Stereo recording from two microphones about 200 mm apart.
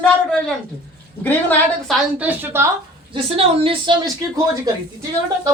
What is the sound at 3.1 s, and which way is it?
A woman's voice, 25° right (ahead or behind).